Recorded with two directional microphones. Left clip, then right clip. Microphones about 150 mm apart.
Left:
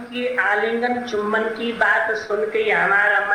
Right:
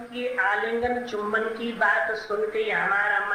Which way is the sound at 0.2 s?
30° left (ahead or behind).